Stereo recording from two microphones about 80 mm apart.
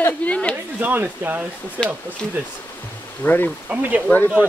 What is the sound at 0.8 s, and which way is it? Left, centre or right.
Speech, right.